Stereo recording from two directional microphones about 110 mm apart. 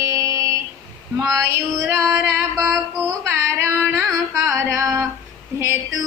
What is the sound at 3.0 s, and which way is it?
Female singing, 25° right (ahead or behind).